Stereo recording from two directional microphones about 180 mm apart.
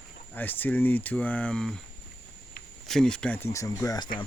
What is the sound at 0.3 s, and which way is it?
Speech, 10° left (ahead or behind).